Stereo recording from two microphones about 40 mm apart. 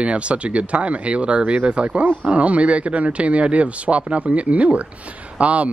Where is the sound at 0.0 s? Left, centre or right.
Right.